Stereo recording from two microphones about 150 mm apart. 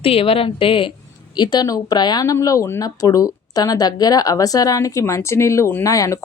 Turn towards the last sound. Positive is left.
turn(degrees=20)  # may be behind; listen again after turning